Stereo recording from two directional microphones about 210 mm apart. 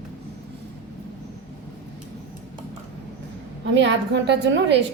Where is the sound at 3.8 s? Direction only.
55° right (ahead or behind).